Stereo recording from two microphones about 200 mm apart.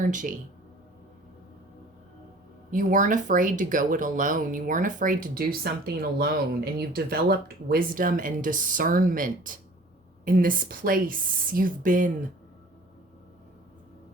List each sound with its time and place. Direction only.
0.0 s speech: 40° right (ahead or behind)
2.7 s a woman's voice: 40° right (ahead or behind)